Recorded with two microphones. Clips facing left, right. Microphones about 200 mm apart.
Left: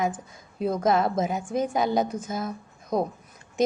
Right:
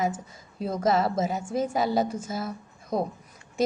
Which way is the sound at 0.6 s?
55° left (ahead or behind).